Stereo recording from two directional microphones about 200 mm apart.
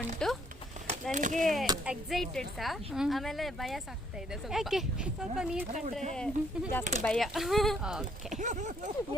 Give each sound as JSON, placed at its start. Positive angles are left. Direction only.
{"t": 0.2, "sound": "a sound", "side_deg": 5}
{"t": 1.1, "sound": "speech", "side_deg": -40}
{"t": 1.4, "sound": "a woman's voice", "side_deg": 0}
{"t": 8.4, "sound": "speech", "side_deg": -35}